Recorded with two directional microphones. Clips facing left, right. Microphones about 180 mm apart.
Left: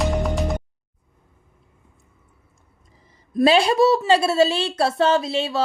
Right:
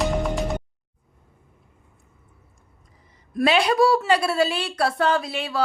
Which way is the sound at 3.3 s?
30° left (ahead or behind).